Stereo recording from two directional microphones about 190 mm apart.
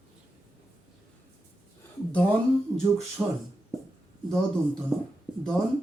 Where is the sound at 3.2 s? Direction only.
5° right (ahead or behind).